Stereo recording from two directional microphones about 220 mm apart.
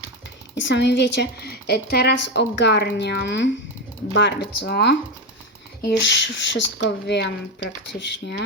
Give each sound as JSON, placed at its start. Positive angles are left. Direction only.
{"t": 0.6, "sound": "speech", "side_deg": 50}
{"t": 6.0, "sound": "speech", "side_deg": 50}